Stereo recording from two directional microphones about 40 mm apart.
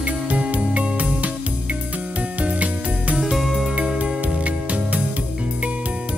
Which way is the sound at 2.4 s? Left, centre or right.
Right.